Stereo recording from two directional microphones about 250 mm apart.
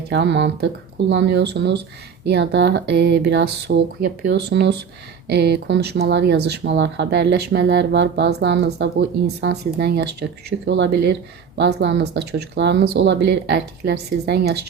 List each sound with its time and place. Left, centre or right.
0.1 s speech: right